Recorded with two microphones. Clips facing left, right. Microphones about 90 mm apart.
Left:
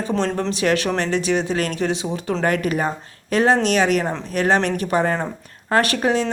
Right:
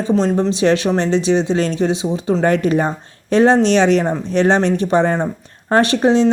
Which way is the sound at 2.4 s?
30° right (ahead or behind).